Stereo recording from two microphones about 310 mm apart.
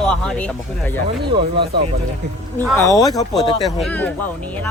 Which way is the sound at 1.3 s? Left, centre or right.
Centre.